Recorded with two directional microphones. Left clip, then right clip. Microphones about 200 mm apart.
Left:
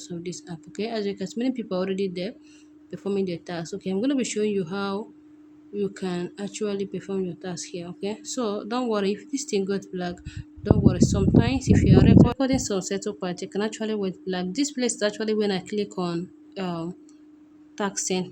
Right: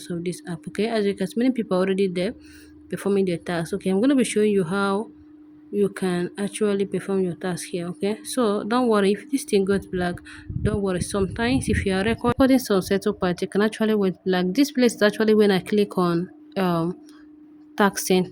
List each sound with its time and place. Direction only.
0.0 s speech: 10° right (ahead or behind)